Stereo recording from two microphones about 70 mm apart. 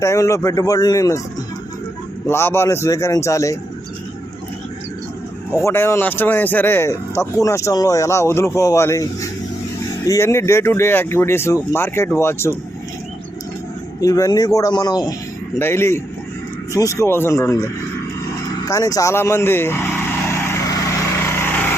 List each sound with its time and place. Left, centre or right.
0.0 s speech: left
2.2 s speech: left
2.6 s speech: left
5.6 s speech: left
7.2 s speech: left
7.7 s speech: left
14.0 s speech: left
15.5 s speech: left
16.7 s speech: left
17.1 s speech: left
18.6 s speech: left
19.1 s vehicle: left
21.2 s lawn mower: left